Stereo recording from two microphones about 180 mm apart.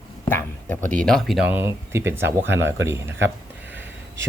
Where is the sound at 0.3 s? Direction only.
10° left (ahead or behind).